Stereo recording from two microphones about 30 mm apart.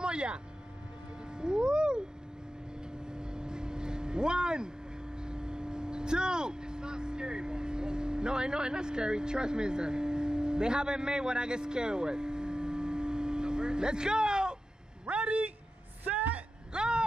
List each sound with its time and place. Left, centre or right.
0.0 s vehicle: right
1.3 s cat: right
3.1 s vehicle: right
15.0 s a sound: right
16.0 s vehicle: right
16.7 s a sound: right